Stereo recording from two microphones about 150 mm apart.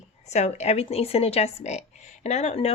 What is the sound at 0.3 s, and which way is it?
Speech, 50° left (ahead or behind).